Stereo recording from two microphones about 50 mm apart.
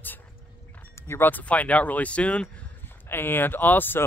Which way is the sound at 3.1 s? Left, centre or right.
Left.